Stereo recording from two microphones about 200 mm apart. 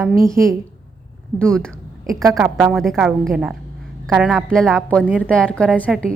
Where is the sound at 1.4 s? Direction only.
5° left (ahead or behind).